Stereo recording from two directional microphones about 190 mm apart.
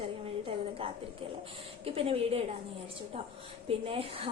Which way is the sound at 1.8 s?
30° right (ahead or behind).